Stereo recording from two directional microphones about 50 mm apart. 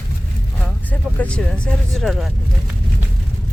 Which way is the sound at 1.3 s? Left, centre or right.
Centre.